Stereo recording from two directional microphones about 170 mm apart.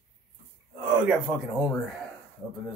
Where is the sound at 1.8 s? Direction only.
Centre (ahead or behind).